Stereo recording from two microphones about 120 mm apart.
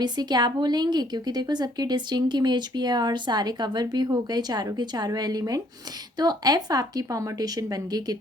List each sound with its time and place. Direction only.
0.0 s a woman's voice: 35° right (ahead or behind)